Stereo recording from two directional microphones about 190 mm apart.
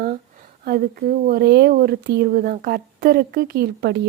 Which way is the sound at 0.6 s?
55° right (ahead or behind).